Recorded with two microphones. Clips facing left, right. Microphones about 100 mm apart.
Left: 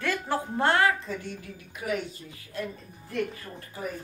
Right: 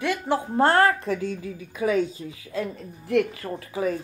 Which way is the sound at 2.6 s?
90° right.